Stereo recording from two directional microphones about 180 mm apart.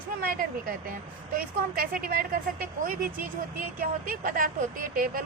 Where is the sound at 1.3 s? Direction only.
55° right (ahead or behind).